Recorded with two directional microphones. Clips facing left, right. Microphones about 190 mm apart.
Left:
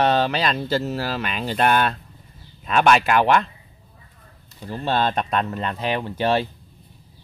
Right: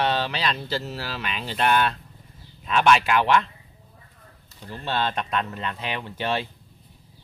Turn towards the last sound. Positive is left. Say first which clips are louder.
# left 6 dB
turn(degrees=40)  # may be behind; listen again after turning